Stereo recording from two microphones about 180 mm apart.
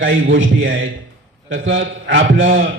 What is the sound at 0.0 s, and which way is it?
A man's voice, 90° right.